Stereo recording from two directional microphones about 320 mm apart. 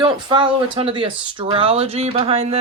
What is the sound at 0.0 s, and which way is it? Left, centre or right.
Speech, centre.